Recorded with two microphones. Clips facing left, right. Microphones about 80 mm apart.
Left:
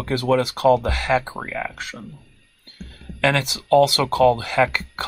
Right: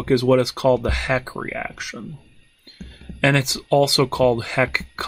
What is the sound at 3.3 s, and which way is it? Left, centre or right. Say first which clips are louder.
Speech: left 1 dB; centre.